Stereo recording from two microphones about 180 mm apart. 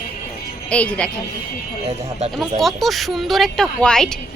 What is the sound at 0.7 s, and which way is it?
Speech, 5° left (ahead or behind).